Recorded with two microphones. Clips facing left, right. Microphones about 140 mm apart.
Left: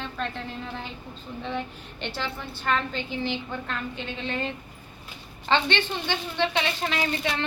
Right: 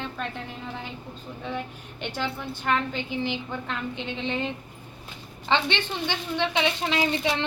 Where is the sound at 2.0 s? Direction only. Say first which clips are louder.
Right 2 dB; 10° right (ahead or behind).